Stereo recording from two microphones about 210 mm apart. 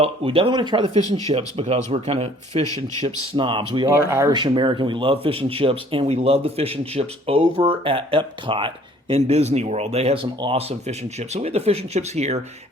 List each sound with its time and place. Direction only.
0.0 s speech: 25° right (ahead or behind)
4.1 s speech: 10° right (ahead or behind)
4.4 s speech: 20° right (ahead or behind)